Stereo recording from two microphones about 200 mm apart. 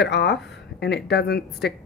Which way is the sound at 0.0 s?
60° left (ahead or behind).